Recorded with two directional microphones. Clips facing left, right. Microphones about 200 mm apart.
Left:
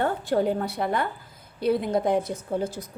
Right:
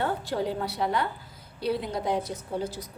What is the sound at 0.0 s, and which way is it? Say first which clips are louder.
A woman's voice: left 5 dB; 50° left (ahead or behind).